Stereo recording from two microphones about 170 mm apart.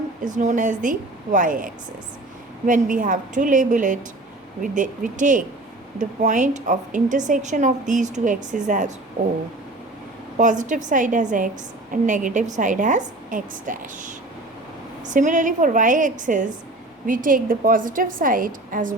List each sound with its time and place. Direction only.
0.3 s a woman's voice: 45° right (ahead or behind)
10.3 s a woman's voice: 45° right (ahead or behind)